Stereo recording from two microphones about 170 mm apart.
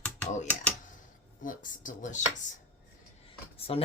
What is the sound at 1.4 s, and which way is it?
Speech, 50° left (ahead or behind).